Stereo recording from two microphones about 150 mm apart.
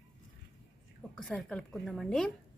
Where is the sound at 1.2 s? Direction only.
5° left (ahead or behind).